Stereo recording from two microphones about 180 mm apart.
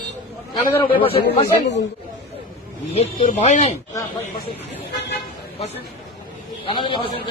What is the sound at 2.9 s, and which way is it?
Speech, 35° left (ahead or behind).